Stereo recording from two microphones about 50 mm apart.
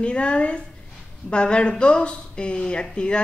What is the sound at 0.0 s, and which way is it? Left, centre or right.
Speech, left.